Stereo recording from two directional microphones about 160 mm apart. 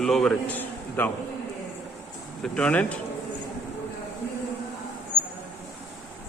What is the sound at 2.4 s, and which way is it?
Speech, 5° left (ahead or behind).